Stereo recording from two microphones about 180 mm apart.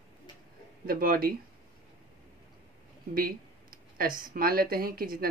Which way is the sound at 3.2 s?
55° right (ahead or behind).